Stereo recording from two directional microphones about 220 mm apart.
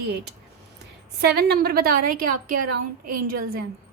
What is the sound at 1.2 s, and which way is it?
A woman's voice, 45° right (ahead or behind).